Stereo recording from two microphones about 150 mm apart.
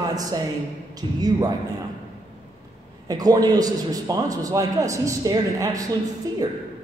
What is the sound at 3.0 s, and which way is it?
A woman's voice, 25° right (ahead or behind).